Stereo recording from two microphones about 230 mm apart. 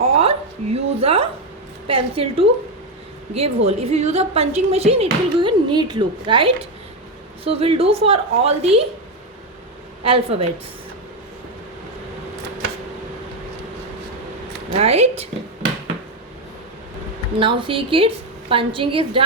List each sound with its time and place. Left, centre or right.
0.0 s a sound: right
1.9 s a woman's voice: right
10.0 s a woman's voice: right
14.7 s a woman's voice: right
17.4 s a woman's voice: right